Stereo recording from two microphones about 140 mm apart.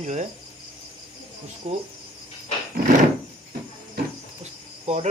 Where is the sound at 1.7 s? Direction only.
50° right (ahead or behind).